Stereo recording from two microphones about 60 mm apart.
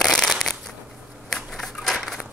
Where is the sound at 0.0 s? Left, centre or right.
Centre.